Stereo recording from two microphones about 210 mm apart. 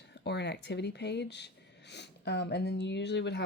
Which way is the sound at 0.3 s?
55° left (ahead or behind).